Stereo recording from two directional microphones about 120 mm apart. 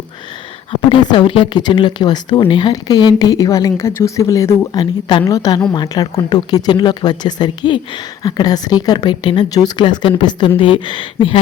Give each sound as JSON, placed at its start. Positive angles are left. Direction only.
{"t": 0.9, "sound": "speech", "side_deg": 45}
{"t": 4.7, "sound": "speech", "side_deg": 35}